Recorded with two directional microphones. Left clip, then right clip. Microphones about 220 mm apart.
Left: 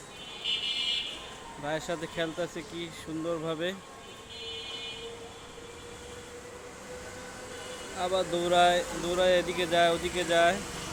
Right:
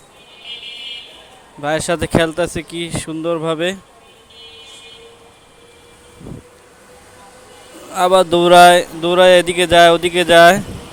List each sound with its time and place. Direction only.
1.6 s speech: 45° right (ahead or behind)
7.9 s speech: 45° right (ahead or behind)